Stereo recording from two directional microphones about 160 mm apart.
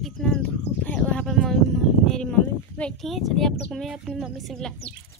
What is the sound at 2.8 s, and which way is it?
A woman's voice, 5° left (ahead or behind).